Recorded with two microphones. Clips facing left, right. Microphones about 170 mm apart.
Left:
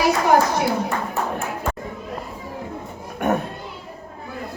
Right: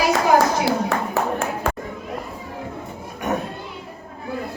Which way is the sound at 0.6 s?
90° right.